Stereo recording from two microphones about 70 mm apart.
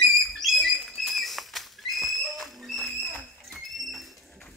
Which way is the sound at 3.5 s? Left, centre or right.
Centre.